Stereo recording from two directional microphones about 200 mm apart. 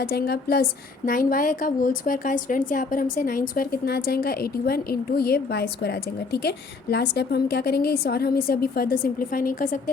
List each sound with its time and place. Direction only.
0.0 s speech: 50° left (ahead or behind)